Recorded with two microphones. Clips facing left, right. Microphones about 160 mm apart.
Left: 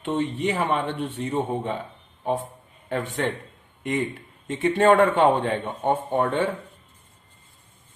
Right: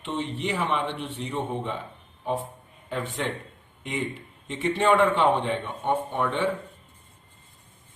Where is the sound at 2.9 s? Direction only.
55° left (ahead or behind).